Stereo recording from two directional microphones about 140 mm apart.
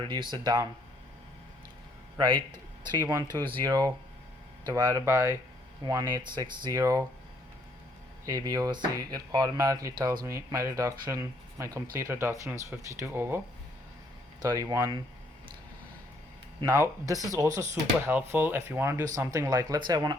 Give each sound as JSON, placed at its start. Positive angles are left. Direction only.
{"t": 0.0, "sound": "speech", "side_deg": -35}
{"t": 3.1, "sound": "speech", "side_deg": -25}
{"t": 8.2, "sound": "speech", "side_deg": -25}
{"t": 14.4, "sound": "speech", "side_deg": -25}
{"t": 16.6, "sound": "speech", "side_deg": -20}